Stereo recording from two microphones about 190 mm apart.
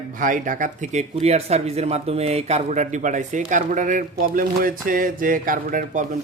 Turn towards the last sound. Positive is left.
turn(degrees=-45)  # may be behind; listen again after turning